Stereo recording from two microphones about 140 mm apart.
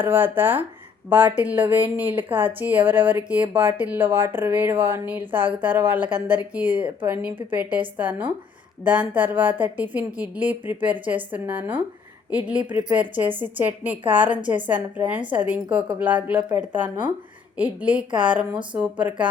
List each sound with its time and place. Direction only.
0.0 s speech: 15° right (ahead or behind)